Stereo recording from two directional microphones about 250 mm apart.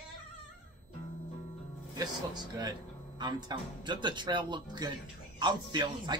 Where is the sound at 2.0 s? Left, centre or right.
Centre.